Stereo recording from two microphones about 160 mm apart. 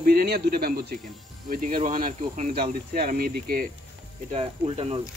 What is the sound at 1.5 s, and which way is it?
Speech, 60° right (ahead or behind).